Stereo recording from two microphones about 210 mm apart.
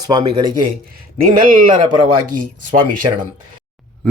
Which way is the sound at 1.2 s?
40° right (ahead or behind).